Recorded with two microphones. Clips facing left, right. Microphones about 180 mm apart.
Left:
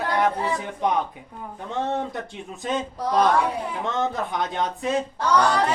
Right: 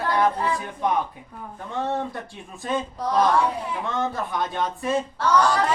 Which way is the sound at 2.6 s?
20° left (ahead or behind).